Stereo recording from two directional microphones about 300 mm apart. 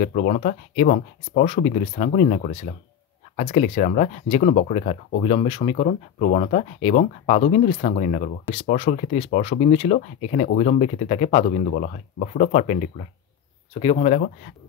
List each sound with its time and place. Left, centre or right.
0.0 s speech: left